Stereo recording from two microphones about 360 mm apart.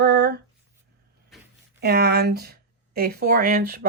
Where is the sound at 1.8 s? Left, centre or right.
Right.